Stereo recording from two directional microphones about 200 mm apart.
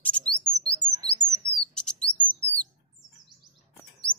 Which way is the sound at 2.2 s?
5° left (ahead or behind).